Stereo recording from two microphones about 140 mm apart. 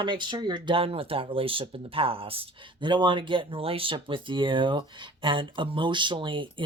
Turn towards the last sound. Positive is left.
turn(degrees=-35)  # may be behind; listen again after turning